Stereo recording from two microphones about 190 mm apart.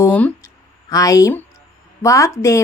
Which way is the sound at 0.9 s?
20° left (ahead or behind).